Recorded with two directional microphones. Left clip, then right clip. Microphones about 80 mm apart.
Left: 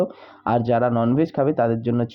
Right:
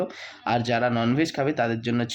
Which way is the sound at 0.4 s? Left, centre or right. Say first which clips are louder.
Left 4 dB; left.